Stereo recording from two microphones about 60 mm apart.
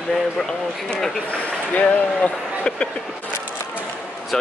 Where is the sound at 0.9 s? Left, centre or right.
Centre.